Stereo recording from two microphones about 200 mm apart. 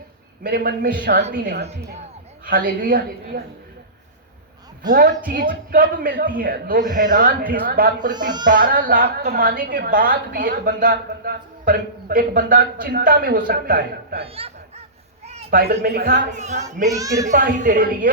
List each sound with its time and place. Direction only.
0.4 s a woman's voice: 45° right (ahead or behind)
4.9 s a woman's voice: 50° right (ahead or behind)
14.2 s speech: 30° right (ahead or behind)
15.4 s speech: 50° right (ahead or behind); by 16.9 s 35° right (ahead or behind)
16.9 s a child's voice: 15° right (ahead or behind)
17.2 s speech: 40° right (ahead or behind)